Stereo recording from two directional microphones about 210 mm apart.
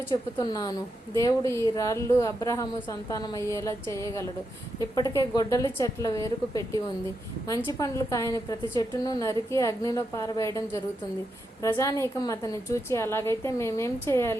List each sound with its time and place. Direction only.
0.1 s a woman's voice: 20° left (ahead or behind)